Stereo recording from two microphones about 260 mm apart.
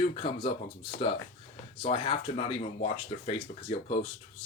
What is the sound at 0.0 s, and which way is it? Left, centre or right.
Speech, left.